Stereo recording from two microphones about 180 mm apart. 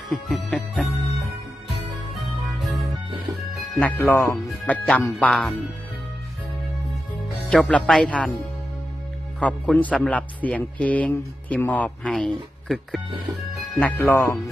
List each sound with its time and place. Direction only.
0.1 s music: centre (ahead or behind)
2.1 s music: centre (ahead or behind)
3.3 s music: 20° right (ahead or behind)
3.8 s a man's voice: 10° left (ahead or behind)
7.5 s a man's voice: 5° left (ahead or behind)
9.4 s a man's voice: 5° left (ahead or behind)
13.3 s speech: 20° right (ahead or behind)
13.7 s a man's voice: 10° left (ahead or behind)